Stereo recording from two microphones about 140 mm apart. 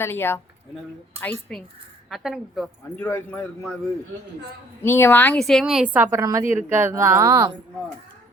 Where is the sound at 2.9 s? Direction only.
15° left (ahead or behind).